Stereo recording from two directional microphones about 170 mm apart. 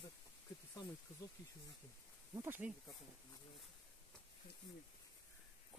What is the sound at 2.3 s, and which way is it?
Speech, 15° right (ahead or behind).